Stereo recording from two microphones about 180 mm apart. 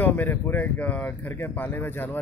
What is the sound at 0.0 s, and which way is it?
Speech, 10° left (ahead or behind).